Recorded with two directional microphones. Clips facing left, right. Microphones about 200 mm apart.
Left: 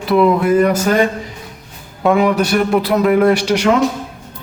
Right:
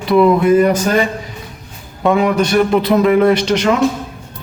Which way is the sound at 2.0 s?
5° left (ahead or behind).